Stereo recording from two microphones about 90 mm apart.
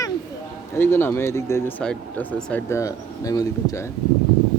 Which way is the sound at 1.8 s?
10° left (ahead or behind).